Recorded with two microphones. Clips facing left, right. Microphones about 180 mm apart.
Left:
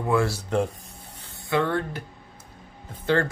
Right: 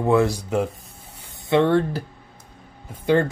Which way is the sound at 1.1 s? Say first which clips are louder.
Right 6 dB; 15° right (ahead or behind).